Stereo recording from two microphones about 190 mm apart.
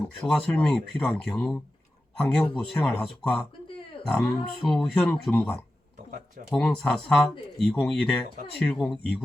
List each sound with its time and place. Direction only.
0.2 s speech: 5° left (ahead or behind)
6.1 s a sound: 55° right (ahead or behind)
6.5 s speech: 5° left (ahead or behind)